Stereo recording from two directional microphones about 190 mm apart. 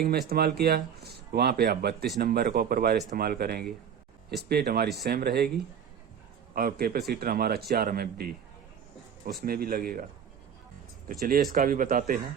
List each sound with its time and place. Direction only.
0.0 s speech: 55° right (ahead or behind)
6.5 s speech: 50° right (ahead or behind)
9.4 s speech: 50° right (ahead or behind)
11.1 s speech: 45° right (ahead or behind)